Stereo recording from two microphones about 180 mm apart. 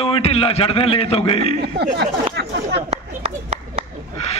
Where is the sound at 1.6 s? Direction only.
60° right (ahead or behind).